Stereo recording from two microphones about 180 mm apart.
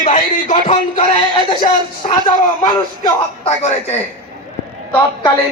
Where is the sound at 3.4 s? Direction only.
40° left (ahead or behind).